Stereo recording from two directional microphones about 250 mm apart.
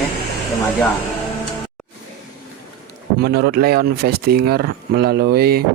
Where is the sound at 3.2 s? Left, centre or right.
Right.